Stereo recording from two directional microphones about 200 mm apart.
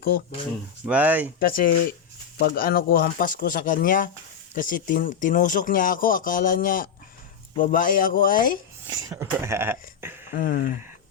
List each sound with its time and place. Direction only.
0.9 s speech: 10° right (ahead or behind)
1.4 s speech: 45° left (ahead or behind)
8.9 s speech: 15° right (ahead or behind)
10.3 s speech: 45° left (ahead or behind)